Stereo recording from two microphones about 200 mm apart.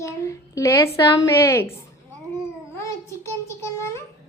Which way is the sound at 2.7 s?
15° left (ahead or behind).